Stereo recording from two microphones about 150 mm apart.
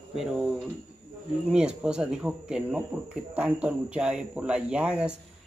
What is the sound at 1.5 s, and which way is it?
Speech, 5° right (ahead or behind).